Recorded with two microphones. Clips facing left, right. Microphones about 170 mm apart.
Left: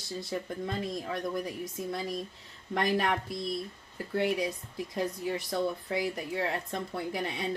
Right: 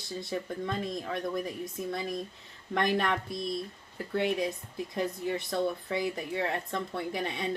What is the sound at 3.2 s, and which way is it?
Speech, 20° right (ahead or behind).